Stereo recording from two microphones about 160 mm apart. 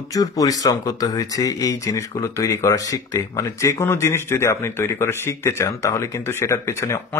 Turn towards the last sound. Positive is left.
turn(degrees=15)  # may be behind; listen again after turning